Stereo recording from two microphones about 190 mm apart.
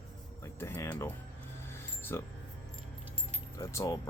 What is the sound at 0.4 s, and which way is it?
Music, 15° left (ahead or behind).